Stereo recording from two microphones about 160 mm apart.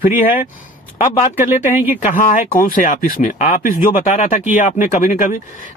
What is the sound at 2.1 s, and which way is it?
Speech, 55° left (ahead or behind).